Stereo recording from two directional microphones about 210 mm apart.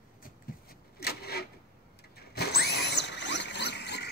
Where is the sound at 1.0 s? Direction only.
50° left (ahead or behind).